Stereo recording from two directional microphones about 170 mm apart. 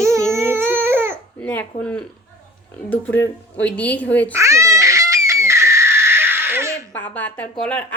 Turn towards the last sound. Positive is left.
turn(degrees=5)  # may be behind; listen again after turning